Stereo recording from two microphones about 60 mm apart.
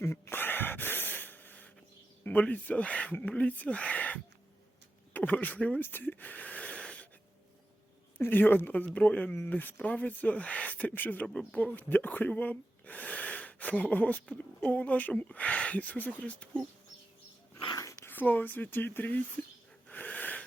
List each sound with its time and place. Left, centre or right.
0.0 s gasp: left
2.2 s speech: left
5.8 s a sound: left; by 7.1 s centre
8.2 s speech: left
18.0 s speech: left
19.9 s wheeze: left